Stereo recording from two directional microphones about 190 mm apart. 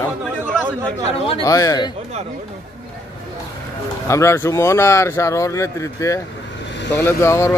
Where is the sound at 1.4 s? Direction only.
20° left (ahead or behind).